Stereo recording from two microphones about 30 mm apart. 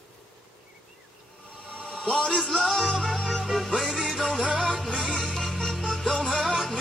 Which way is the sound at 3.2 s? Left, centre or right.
Centre.